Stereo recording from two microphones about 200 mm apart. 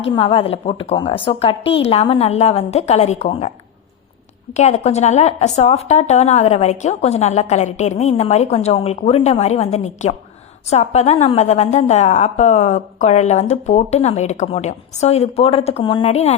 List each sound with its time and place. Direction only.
0.2 s a woman's voice: 25° left (ahead or behind)
4.5 s a woman's voice: 35° left (ahead or behind)